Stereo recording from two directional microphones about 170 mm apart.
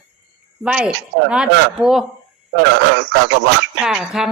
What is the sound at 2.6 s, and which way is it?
A man's voice, 90° right.